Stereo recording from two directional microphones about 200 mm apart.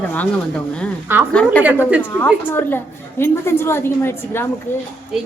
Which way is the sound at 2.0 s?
10° left (ahead or behind).